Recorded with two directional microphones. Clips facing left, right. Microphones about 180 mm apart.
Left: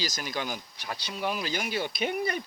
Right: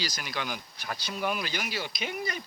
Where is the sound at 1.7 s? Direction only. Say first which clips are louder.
Left 5 dB; 50° left (ahead or behind).